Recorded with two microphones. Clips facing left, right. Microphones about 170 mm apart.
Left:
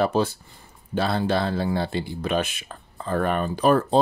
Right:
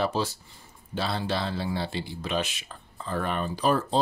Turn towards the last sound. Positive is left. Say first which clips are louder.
# left 5 dB
turn(degrees=55)  # may be behind; listen again after turning